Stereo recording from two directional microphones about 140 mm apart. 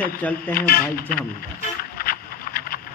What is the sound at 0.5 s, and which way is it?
Speech, 90° left.